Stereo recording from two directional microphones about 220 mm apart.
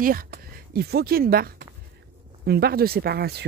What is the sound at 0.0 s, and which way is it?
Speech, 40° right (ahead or behind).